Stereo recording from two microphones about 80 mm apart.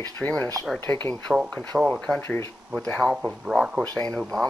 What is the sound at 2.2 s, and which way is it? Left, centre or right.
Speech, left.